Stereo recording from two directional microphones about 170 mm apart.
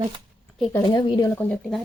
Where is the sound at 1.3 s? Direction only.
10° left (ahead or behind).